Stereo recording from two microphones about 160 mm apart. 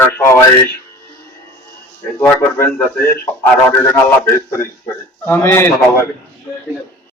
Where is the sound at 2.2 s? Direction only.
15° left (ahead or behind).